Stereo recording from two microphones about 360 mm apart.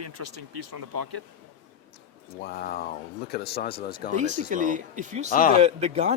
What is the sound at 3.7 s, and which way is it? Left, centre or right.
Speech, centre.